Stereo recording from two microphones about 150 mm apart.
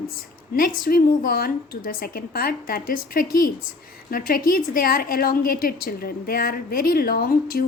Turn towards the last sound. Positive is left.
turn(degrees=75)  # may be behind; listen again after turning